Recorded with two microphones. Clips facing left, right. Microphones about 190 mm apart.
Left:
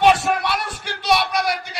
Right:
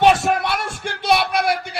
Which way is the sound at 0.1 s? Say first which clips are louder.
Right 1 dB; 50° right (ahead or behind).